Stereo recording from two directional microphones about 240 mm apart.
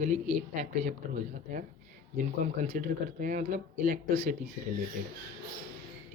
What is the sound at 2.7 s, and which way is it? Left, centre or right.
Speech, right.